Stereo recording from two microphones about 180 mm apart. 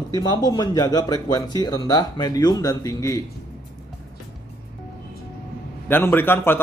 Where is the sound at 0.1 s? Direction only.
20° left (ahead or behind).